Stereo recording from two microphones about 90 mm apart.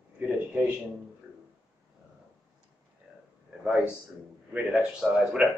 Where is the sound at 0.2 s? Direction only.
20° right (ahead or behind).